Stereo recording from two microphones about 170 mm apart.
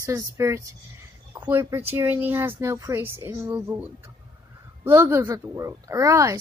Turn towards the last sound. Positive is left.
turn(degrees=-20)  # may be behind; listen again after turning